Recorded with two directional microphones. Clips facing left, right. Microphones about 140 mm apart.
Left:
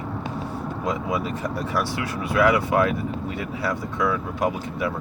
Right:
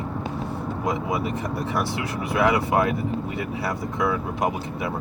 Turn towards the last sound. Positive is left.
turn(degrees=-25)  # may be behind; listen again after turning